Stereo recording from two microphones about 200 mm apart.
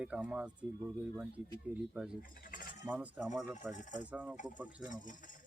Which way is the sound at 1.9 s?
5° right (ahead or behind).